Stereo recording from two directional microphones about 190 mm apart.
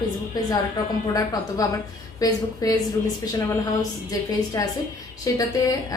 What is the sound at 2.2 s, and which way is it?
Speech, 20° left (ahead or behind).